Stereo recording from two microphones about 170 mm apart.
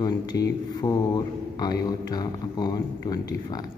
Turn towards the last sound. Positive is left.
turn(degrees=20)  # may be behind; listen again after turning